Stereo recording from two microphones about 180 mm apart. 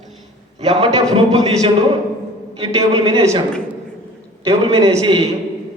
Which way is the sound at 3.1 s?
20° right (ahead or behind).